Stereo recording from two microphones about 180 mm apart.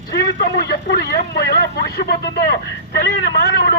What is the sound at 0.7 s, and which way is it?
A man's voice, 65° left (ahead or behind).